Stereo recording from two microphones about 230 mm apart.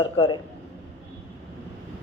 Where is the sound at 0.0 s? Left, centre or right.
Left.